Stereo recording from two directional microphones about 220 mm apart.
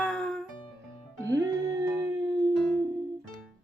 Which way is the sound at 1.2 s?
15° right (ahead or behind).